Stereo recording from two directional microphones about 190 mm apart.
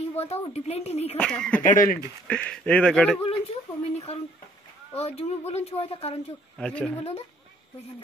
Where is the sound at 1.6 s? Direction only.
45° left (ahead or behind).